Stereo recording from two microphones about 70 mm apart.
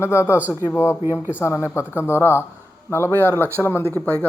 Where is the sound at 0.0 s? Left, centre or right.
Left.